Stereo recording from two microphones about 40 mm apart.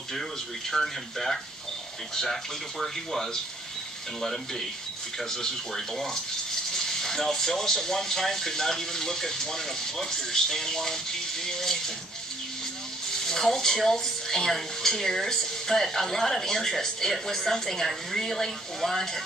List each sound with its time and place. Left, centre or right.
0.7 s speech: centre
2.8 s speech: centre
13.1 s speech: centre